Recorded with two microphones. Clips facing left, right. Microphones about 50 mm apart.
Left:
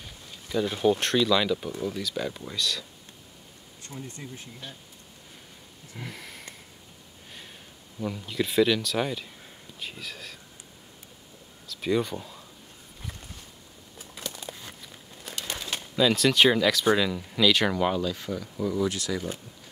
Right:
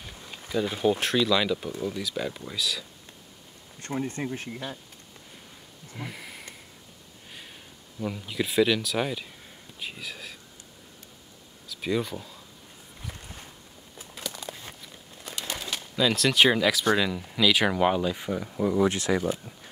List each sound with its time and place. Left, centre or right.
0.5 s speech: centre
3.8 s speech: right
5.9 s sniff: centre
8.0 s speech: centre
11.6 s speech: centre
16.0 s speech: centre
17.7 s speech: centre